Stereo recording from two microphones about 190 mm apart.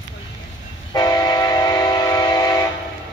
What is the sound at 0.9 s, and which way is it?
Train, 20° left (ahead or behind).